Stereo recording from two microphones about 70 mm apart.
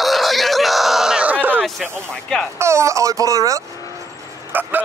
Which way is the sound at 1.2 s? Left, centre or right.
Right.